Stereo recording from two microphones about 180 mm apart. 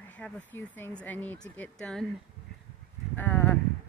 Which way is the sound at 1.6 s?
5° left (ahead or behind).